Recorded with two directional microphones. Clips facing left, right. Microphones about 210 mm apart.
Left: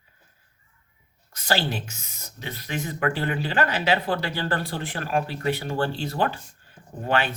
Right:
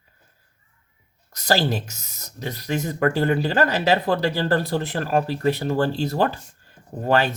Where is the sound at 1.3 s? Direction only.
40° right (ahead or behind).